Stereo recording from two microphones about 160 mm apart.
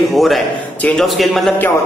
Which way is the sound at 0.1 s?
Centre (ahead or behind).